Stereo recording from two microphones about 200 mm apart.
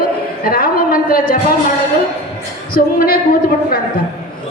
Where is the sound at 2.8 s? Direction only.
45° left (ahead or behind).